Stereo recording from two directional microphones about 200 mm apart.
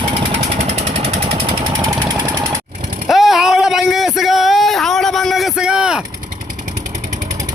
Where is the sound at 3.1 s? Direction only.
Centre (ahead or behind).